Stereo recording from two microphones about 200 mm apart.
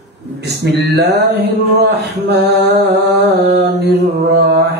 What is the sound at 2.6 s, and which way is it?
Mantra, 60° right (ahead or behind).